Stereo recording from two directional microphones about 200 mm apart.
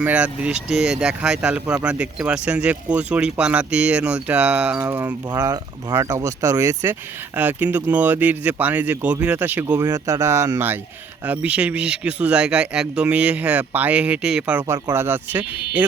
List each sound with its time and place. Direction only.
0.0 s speech: 5° right (ahead or behind)